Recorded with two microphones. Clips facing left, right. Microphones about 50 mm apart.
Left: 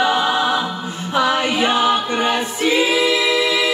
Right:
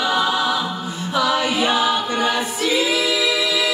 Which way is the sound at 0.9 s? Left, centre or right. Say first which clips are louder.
Left 2 dB; left.